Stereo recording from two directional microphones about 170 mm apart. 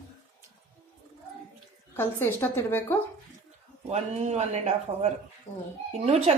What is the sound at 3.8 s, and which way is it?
Speech, 40° right (ahead or behind).